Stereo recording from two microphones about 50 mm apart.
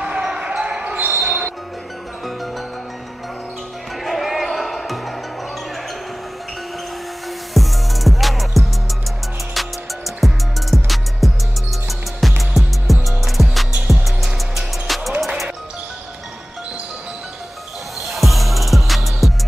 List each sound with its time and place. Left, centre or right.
0.0 s basketball bounce: centre
1.2 s music: centre
4.0 s music: centre
7.5 s music: centre
18.1 s music: centre